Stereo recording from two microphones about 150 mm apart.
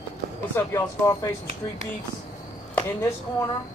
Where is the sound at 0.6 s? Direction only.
20° left (ahead or behind).